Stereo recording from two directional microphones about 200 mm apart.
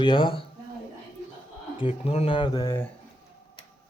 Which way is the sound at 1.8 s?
30° left (ahead or behind).